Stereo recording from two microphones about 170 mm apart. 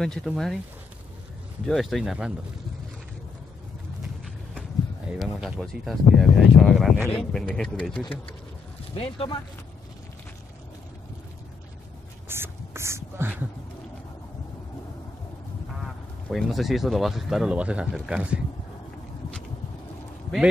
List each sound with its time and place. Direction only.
0.0 s speech: 5° left (ahead or behind)
1.7 s speech: centre (ahead or behind)
5.1 s speech: 5° right (ahead or behind)
8.0 s speech: 30° left (ahead or behind)
12.3 s whispering: 15° right (ahead or behind)
16.3 s speech: centre (ahead or behind)